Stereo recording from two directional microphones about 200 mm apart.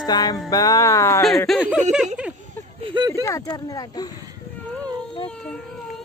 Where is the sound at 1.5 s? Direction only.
Centre (ahead or behind).